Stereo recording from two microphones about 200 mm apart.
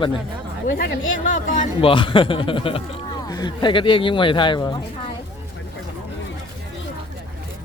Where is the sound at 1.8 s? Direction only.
25° left (ahead or behind).